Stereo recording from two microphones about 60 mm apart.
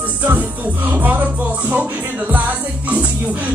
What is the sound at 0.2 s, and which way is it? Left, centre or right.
Music, right.